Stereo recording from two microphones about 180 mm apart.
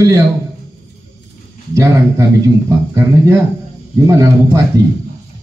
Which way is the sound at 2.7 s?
15° right (ahead or behind).